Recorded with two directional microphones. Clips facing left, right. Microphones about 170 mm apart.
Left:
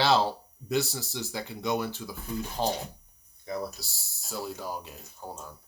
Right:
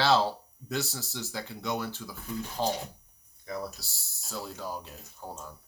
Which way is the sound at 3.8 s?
15° left (ahead or behind).